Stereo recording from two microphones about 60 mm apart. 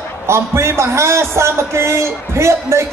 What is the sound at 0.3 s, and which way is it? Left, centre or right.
A man's voice, right.